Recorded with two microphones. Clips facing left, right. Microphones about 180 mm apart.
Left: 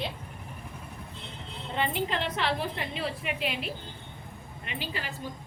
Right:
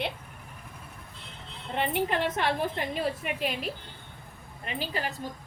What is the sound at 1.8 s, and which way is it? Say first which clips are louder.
A woman's voice: right 2 dB; 55° right (ahead or behind).